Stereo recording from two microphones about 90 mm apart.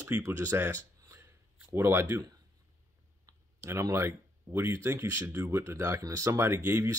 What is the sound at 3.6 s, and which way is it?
Speech, 30° right (ahead or behind).